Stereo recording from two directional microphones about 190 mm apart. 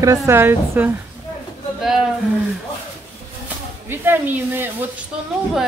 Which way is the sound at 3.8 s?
10° right (ahead or behind).